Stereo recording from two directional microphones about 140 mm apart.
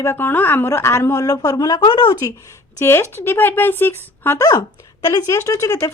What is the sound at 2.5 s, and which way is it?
Speech, 20° left (ahead or behind).